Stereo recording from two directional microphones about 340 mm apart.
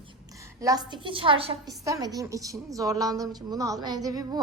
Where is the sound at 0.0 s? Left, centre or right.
Centre.